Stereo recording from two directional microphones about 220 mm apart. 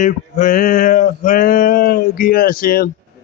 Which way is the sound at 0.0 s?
35° left (ahead or behind).